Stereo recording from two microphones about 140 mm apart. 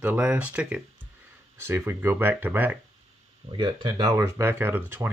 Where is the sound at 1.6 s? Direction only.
20° right (ahead or behind).